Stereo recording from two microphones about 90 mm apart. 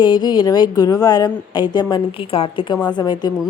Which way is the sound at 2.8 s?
50° left (ahead or behind).